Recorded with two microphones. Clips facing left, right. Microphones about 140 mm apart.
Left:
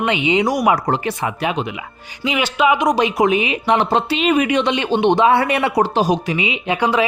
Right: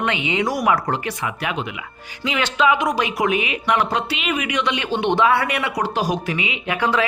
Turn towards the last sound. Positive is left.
turn(degrees=15)  # may be behind; listen again after turning